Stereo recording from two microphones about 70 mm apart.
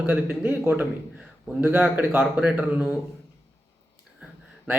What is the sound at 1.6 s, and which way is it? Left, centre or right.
A man's voice, right.